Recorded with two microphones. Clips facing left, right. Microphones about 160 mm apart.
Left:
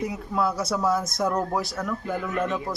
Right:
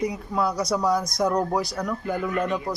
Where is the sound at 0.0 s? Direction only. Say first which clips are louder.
Right 1 dB; 5° left (ahead or behind).